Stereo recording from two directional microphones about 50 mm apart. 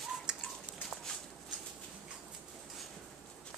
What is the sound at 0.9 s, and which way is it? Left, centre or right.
Walk, centre.